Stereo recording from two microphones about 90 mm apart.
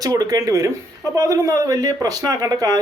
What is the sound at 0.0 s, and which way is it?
Speech, 45° right (ahead or behind).